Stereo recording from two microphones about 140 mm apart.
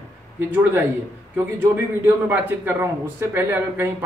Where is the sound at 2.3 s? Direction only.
15° right (ahead or behind).